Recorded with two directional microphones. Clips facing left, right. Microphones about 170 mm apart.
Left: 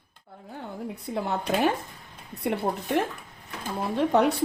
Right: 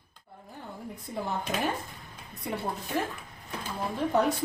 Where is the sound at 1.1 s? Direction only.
70° left (ahead or behind).